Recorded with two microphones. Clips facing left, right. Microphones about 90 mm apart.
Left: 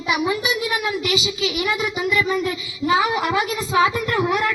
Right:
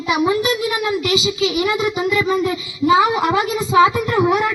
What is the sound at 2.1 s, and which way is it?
A woman's voice, 25° right (ahead or behind).